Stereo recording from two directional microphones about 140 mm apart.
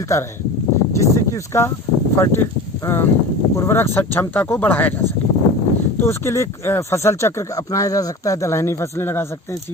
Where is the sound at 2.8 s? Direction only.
15° left (ahead or behind).